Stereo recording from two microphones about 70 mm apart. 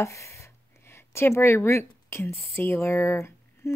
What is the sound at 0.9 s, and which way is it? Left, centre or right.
A woman's voice, left.